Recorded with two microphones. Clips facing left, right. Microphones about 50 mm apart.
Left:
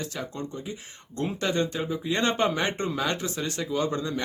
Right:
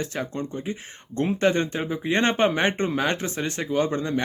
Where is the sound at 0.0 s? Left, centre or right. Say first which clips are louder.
Right 4 dB; right.